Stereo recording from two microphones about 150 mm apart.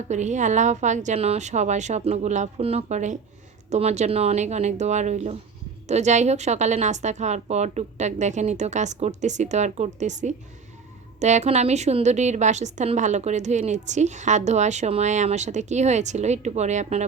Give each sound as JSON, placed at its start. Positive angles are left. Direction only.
{"t": 0.1, "sound": "a woman's voice", "side_deg": -50}